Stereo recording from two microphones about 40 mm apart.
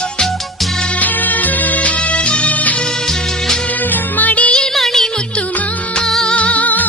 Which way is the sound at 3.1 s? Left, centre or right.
Centre.